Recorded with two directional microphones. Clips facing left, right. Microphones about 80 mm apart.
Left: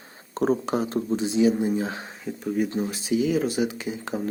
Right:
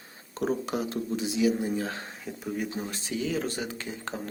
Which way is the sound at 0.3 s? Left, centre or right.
Left.